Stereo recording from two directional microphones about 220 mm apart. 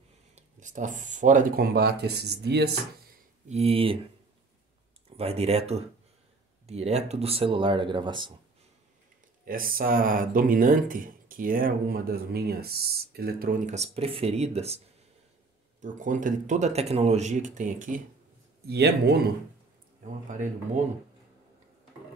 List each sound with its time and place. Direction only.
0.4 s speech: 35° right (ahead or behind)
3.4 s speech: 30° right (ahead or behind)
5.1 s speech: 25° right (ahead or behind)
9.4 s speech: 40° right (ahead or behind)
15.8 s speech: 35° right (ahead or behind)
18.7 s speech: 45° right (ahead or behind)
20.2 s speech: 35° right (ahead or behind)